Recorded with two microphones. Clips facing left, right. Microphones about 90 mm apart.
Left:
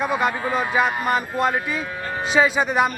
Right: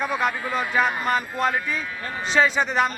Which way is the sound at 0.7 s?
5° left (ahead or behind).